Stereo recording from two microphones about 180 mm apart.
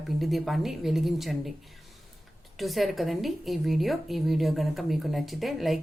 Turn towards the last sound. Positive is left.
turn(degrees=0)  # may be behind; listen again after turning